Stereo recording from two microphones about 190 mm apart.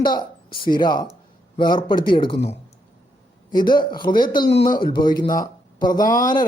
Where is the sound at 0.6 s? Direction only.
20° left (ahead or behind).